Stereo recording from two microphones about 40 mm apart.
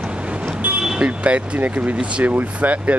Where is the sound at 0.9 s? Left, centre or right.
Right.